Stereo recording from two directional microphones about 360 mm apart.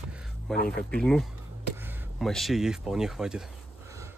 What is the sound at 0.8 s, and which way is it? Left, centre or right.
Speech, centre.